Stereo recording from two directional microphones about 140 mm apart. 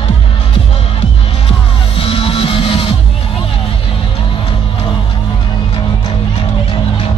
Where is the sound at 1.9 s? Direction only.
40° left (ahead or behind).